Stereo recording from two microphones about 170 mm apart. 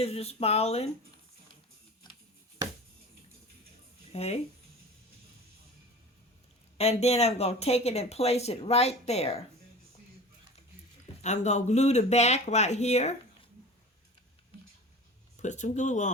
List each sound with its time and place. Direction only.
0.0 s speech: 35° left (ahead or behind)
2.0 s tick-tock: 25° left (ahead or behind)
4.1 s speech: 40° left (ahead or behind)
6.7 s speech: 35° left (ahead or behind)
11.2 s speech: 40° left (ahead or behind)
15.4 s speech: 45° left (ahead or behind)